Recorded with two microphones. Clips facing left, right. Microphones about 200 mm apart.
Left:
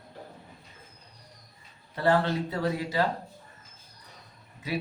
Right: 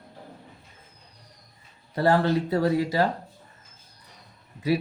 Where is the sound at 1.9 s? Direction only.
40° right (ahead or behind).